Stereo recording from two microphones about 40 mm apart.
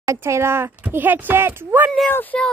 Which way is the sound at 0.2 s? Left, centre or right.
Right.